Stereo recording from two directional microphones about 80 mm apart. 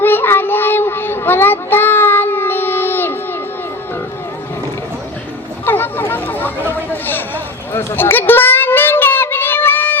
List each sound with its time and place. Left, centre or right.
0.0 s child singing: left
5.6 s boat: left
6.7 s a sound: left
8.3 s child singing: left